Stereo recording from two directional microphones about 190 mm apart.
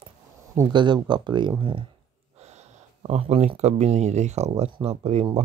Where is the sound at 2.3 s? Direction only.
35° right (ahead or behind).